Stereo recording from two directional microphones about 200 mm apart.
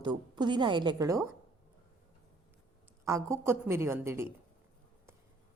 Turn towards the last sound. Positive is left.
turn(degrees=-15)  # may be behind; listen again after turning